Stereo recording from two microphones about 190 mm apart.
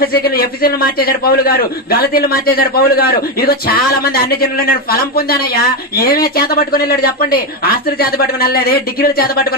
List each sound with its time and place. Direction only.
0.0 s a man's voice: 50° left (ahead or behind)